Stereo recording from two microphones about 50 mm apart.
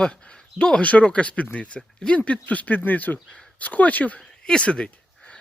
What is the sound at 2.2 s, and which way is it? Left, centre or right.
Speech, left.